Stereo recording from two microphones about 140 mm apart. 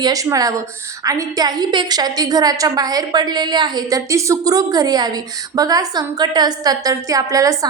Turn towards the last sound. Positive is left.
turn(degrees=-25)  # may be behind; listen again after turning